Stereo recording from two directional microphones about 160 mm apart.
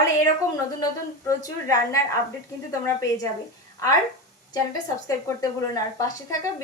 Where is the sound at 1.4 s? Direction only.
20° left (ahead or behind).